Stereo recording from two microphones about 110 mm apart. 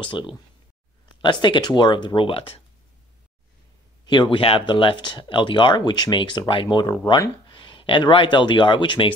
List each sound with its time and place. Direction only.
0.0 s speech: 45° left (ahead or behind)
4.0 s speech: 45° left (ahead or behind)